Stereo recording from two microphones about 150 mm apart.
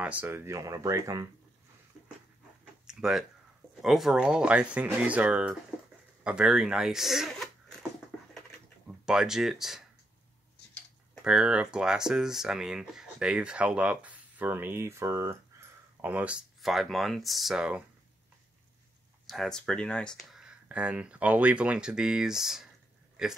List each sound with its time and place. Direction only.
0.0 s speech: 10° right (ahead or behind)
2.9 s speech: 5° right (ahead or behind)
8.4 s typing: 5° right (ahead or behind)
11.2 s speech: 5° right (ahead or behind)
19.2 s speech: centre (ahead or behind)